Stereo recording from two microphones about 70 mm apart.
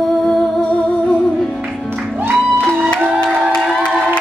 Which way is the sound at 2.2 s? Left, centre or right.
Right.